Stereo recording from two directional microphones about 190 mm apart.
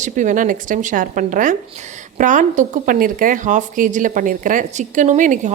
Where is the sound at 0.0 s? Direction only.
40° right (ahead or behind).